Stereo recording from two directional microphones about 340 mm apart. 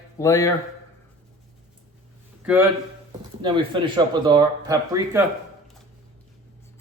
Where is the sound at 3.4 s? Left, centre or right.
Centre.